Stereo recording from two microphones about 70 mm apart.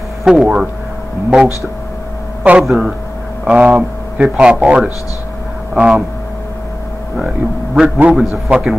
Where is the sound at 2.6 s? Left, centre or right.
Centre.